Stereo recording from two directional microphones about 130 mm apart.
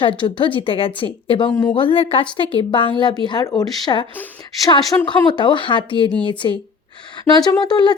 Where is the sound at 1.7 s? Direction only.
40° left (ahead or behind).